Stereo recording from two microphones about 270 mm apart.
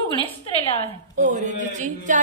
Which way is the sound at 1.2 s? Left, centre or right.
Right.